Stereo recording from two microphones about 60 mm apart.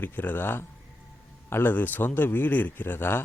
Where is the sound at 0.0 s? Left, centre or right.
Left.